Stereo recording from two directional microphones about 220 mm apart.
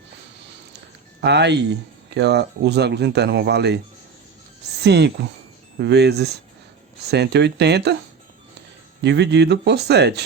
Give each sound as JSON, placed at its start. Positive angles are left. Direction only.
{"t": 1.2, "sound": "speech", "side_deg": -50}
{"t": 4.8, "sound": "speech", "side_deg": -50}
{"t": 9.0, "sound": "speech", "side_deg": -50}